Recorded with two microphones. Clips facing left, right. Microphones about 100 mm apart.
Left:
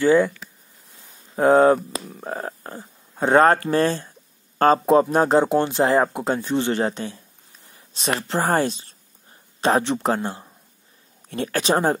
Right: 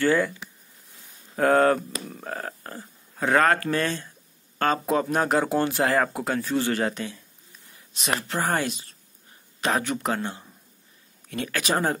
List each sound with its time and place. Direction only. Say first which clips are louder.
0.0 s speech: left 5 dB; 20° left (ahead or behind)
1.3 s speech: left 5 dB; 20° left (ahead or behind)